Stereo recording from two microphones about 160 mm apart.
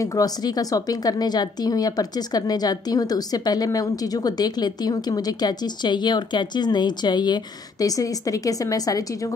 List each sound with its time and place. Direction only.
0.0 s speech: 20° left (ahead or behind)